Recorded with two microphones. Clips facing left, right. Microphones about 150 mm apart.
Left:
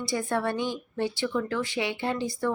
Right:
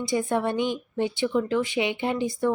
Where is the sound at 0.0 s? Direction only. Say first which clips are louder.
Right 3 dB; 20° right (ahead or behind).